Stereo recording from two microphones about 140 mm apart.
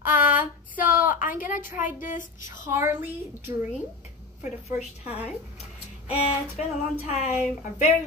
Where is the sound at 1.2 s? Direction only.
75° left (ahead or behind).